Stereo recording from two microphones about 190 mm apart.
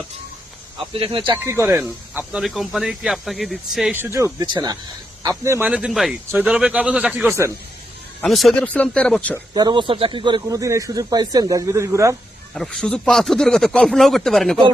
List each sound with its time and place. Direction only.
0.9 s speech: 30° right (ahead or behind)
1.5 s speech: 15° right (ahead or behind)
1.8 s speech: 5° right (ahead or behind)
3.9 s speech: 15° right (ahead or behind)
8.2 s speech: centre (ahead or behind)
9.6 s speech: 25° right (ahead or behind)
12.5 s speech: centre (ahead or behind)